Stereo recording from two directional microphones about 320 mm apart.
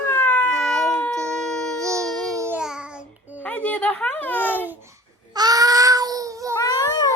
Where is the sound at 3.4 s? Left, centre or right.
Centre.